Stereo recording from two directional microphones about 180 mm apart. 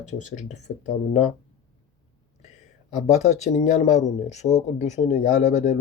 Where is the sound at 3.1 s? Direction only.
40° left (ahead or behind).